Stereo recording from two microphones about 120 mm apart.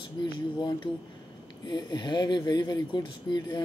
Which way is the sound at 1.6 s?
40° left (ahead or behind).